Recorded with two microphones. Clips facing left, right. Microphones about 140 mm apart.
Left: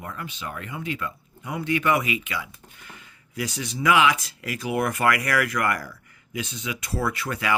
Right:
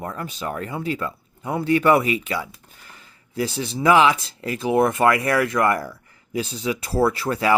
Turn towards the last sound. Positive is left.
turn(degrees=-30)  # may be behind; listen again after turning